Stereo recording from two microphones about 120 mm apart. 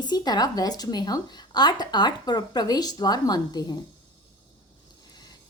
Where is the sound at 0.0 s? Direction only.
35° left (ahead or behind).